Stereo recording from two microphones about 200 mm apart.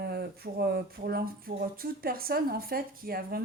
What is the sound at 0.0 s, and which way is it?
Speech, 50° right (ahead or behind).